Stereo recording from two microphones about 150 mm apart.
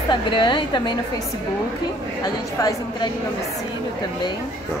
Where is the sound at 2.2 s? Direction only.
30° left (ahead or behind).